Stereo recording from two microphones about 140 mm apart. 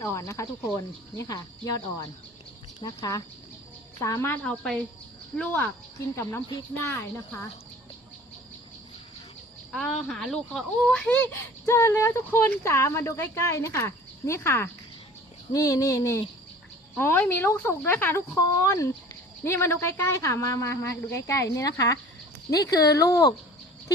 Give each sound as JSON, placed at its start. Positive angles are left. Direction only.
{"t": 0.0, "sound": "speech", "side_deg": 20}
{"t": 4.3, "sound": "speech", "side_deg": 5}
{"t": 9.7, "sound": "speech", "side_deg": 5}
{"t": 11.6, "sound": "speech", "side_deg": 20}